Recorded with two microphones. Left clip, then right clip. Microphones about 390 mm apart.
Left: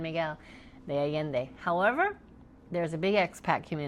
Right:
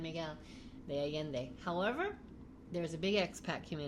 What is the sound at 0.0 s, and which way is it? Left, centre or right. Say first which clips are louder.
Speech: left 10 dB; left.